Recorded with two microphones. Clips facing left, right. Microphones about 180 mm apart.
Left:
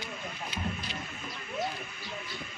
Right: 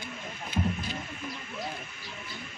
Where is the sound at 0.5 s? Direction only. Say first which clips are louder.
Right 8 dB; 50° right (ahead or behind).